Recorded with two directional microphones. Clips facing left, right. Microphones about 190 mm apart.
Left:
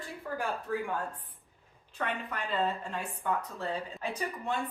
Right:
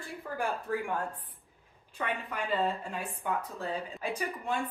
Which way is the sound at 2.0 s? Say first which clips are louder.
Right 1 dB; 10° right (ahead or behind).